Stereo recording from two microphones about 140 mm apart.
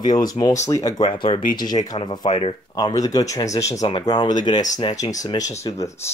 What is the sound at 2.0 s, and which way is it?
Speech, 40° left (ahead or behind).